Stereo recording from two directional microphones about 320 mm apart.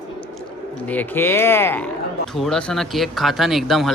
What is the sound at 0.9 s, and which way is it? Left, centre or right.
Speech, centre.